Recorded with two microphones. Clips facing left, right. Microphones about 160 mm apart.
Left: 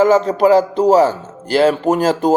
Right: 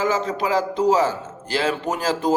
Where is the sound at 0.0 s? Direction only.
40° left (ahead or behind).